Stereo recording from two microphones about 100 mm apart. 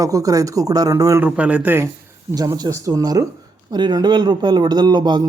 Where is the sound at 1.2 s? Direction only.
15° right (ahead or behind).